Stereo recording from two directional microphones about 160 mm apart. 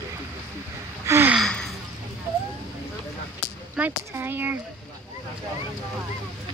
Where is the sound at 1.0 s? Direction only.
15° right (ahead or behind).